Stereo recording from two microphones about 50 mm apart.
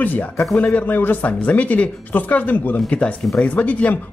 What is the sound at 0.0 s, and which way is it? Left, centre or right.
Speech, left.